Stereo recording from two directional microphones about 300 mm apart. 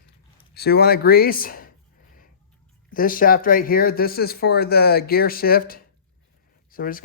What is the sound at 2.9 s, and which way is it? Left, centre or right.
Speech, left.